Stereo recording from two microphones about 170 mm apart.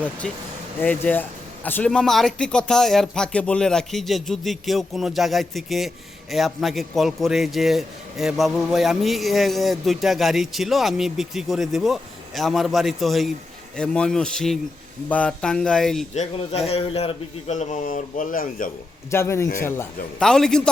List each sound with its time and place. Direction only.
0.8 s a man's voice: 10° left (ahead or behind)
16.1 s a man's voice: 35° left (ahead or behind); by 18.7 s 55° left (ahead or behind)
19.1 s a man's voice: 15° left (ahead or behind)
20.1 s a man's voice: 5° left (ahead or behind)